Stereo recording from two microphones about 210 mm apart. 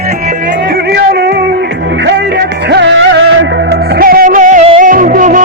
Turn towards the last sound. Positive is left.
turn(degrees=-40)  # may be behind; listen again after turning